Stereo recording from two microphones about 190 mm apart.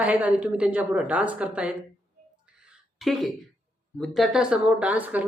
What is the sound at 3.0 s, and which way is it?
Speech, centre (ahead or behind).